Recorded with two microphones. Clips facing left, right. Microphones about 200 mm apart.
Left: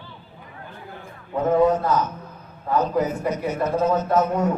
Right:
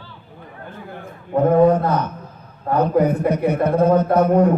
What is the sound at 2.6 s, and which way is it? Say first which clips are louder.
A man's voice: right 5 dB; 55° right (ahead or behind).